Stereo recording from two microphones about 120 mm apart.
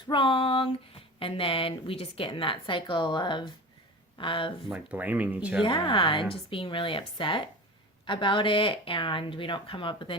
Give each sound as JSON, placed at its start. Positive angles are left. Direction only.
{"t": 0.1, "sound": "speech", "side_deg": 45}
{"t": 4.6, "sound": "speech", "side_deg": 0}
{"t": 4.9, "sound": "speech", "side_deg": -15}
{"t": 5.6, "sound": "speech", "side_deg": 40}